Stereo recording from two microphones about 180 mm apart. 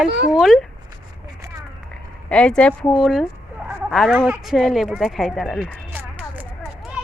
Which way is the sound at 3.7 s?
10° right (ahead or behind).